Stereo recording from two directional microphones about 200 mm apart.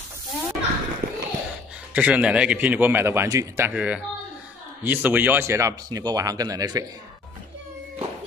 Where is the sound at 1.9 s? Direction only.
5° right (ahead or behind).